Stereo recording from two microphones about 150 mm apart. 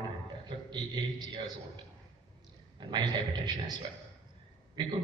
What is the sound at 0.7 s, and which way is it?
Speech, 30° right (ahead or behind).